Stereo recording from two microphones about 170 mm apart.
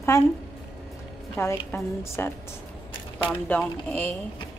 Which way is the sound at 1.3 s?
15° left (ahead or behind).